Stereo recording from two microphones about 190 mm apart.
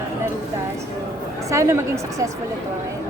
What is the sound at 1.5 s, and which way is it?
Speech, 15° right (ahead or behind).